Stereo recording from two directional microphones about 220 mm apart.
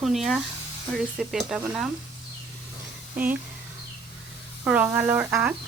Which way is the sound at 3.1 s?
5° right (ahead or behind).